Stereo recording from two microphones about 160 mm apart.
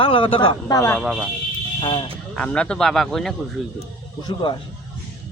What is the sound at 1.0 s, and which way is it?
Speech, 5° right (ahead or behind).